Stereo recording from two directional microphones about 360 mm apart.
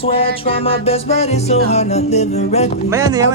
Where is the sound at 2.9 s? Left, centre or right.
Centre.